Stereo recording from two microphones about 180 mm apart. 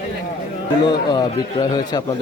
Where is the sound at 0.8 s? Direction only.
25° left (ahead or behind).